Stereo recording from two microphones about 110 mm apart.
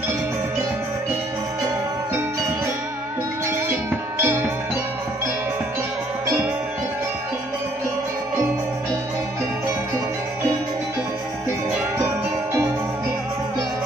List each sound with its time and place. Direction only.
4.2 s music: 25° right (ahead or behind)